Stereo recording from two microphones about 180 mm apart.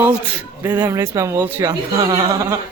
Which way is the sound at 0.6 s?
10° right (ahead or behind).